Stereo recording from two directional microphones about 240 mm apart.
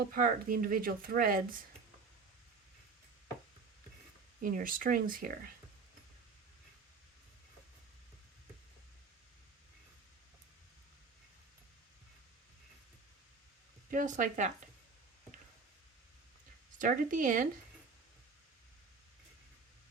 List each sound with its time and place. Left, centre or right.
0.1 s speech: right
4.4 s speech: right
13.9 s speech: right
16.7 s speech: right